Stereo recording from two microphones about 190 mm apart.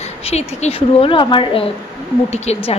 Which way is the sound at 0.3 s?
35° left (ahead or behind).